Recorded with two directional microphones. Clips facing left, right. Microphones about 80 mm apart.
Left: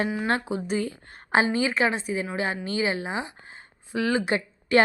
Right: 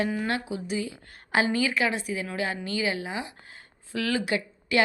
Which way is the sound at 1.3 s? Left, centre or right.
Left.